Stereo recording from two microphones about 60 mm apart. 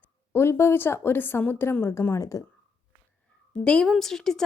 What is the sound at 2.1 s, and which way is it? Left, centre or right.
Speech, left.